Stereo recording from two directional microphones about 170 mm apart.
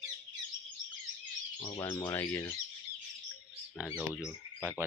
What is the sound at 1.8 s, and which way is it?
Speech, 20° left (ahead or behind).